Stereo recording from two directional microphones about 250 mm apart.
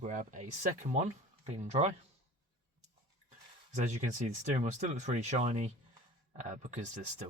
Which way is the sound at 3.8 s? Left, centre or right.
Right.